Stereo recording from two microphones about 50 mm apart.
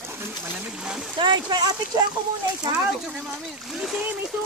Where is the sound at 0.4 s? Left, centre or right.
Right.